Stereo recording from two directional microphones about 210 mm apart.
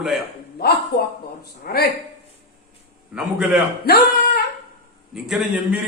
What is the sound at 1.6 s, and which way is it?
Speech, 50° left (ahead or behind).